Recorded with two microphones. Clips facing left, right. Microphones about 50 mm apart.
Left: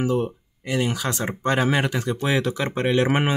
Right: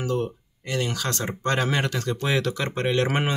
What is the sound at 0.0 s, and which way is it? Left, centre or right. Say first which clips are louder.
Speech: left 3 dB; centre.